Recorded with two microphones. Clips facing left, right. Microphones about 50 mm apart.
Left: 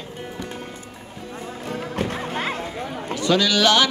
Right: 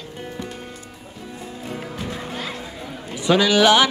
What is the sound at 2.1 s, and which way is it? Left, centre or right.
Music, left.